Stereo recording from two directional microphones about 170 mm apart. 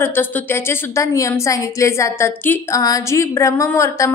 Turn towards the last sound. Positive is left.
turn(degrees=20)  # may be behind; listen again after turning